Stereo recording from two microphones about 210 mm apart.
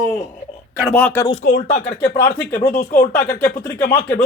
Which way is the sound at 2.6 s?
30° left (ahead or behind).